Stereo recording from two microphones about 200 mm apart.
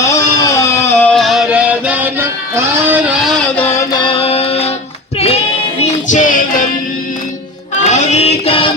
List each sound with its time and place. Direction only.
0.1 s a sound: 15° left (ahead or behind)
3.8 s music: 25° left (ahead or behind)
5.8 s music: 40° left (ahead or behind)
7.8 s child singing: 35° left (ahead or behind)